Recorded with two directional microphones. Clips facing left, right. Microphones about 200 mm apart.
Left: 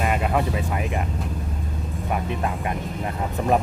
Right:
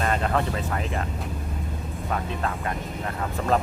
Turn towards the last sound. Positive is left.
turn(degrees=15)  # may be behind; listen again after turning